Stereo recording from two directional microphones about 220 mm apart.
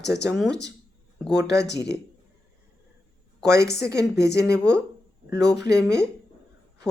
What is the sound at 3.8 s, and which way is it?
Speech, 15° right (ahead or behind).